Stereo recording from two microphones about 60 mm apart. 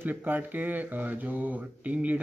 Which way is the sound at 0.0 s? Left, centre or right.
Right.